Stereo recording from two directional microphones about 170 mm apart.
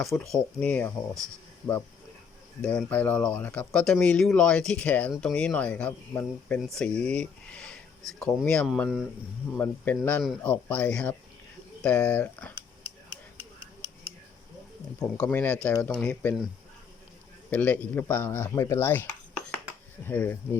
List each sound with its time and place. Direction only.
0.0 s speech: centre (ahead or behind)
2.6 s speech: 5° left (ahead or behind)
9.6 s speech: 10° left (ahead or behind)
14.9 s speech: 10° left (ahead or behind)
17.5 s speech: 10° left (ahead or behind)
20.1 s speech: 10° left (ahead or behind)